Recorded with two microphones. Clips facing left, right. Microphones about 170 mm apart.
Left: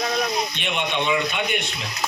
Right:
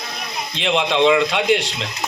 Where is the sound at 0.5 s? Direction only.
90° right.